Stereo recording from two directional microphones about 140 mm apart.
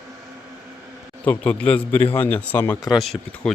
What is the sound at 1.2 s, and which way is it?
A man's voice, 10° left (ahead or behind).